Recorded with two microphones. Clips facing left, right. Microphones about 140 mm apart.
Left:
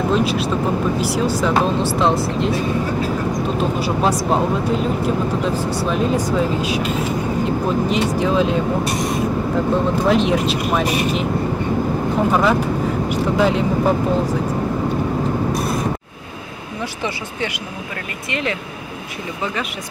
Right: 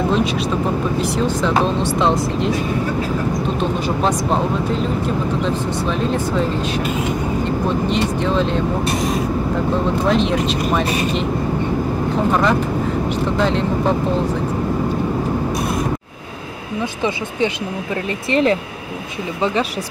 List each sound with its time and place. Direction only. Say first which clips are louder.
0.1 s speech: even; centre (ahead or behind)
5.9 s speech: left 2 dB; 10° left (ahead or behind)
7.9 s speech: left 1 dB; 5° left (ahead or behind)
10.0 s speech: left 1 dB; 5° left (ahead or behind)
12.3 s speech: even; 5° left (ahead or behind)
17.0 s speech: right 6 dB; 20° right (ahead or behind)
18.3 s speech: right 8 dB; 35° right (ahead or behind)